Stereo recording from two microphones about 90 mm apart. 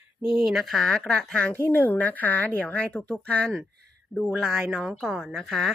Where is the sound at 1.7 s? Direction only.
20° left (ahead or behind).